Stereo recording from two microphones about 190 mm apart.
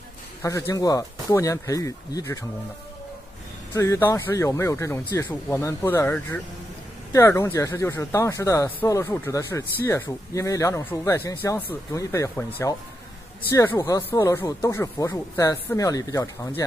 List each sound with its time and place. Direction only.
0.4 s speech: 15° left (ahead or behind)
3.7 s speech: 15° left (ahead or behind)